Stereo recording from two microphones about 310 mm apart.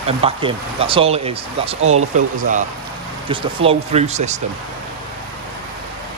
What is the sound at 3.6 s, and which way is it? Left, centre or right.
Speech, right.